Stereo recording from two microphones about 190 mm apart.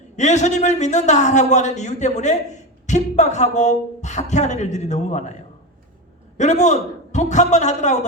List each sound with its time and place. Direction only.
0.2 s a man's voice: 40° left (ahead or behind)
6.3 s a man's voice: 40° left (ahead or behind)